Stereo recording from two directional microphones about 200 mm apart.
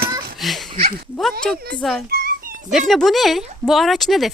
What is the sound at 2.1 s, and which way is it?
Dog, 50° right (ahead or behind).